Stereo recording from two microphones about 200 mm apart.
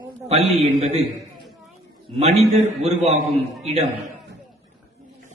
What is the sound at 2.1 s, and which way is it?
A man's voice, 30° right (ahead or behind).